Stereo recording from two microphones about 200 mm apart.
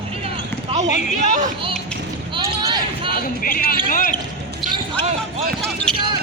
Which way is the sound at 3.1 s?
45° left (ahead or behind).